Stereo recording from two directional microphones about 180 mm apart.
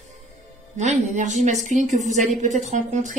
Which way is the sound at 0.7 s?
40° right (ahead or behind).